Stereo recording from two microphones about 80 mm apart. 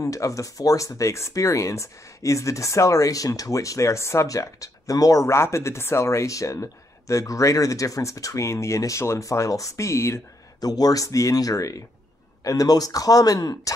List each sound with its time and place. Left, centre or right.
0.0 s speech: left
10.6 s speech: left